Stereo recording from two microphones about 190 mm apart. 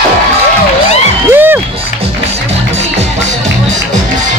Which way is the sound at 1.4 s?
10° right (ahead or behind).